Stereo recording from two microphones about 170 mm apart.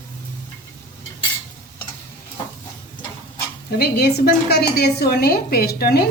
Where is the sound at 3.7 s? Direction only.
70° left (ahead or behind).